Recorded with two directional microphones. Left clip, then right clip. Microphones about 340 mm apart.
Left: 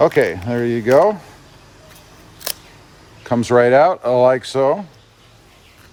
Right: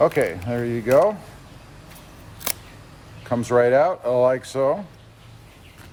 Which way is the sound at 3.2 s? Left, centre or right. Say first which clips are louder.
Left 5 dB; left.